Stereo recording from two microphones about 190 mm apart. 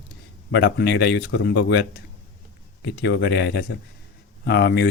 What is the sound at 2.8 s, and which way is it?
Speech, 65° left (ahead or behind).